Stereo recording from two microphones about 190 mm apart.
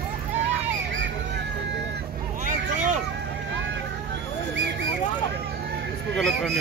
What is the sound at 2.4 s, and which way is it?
Vehicle, 40° right (ahead or behind).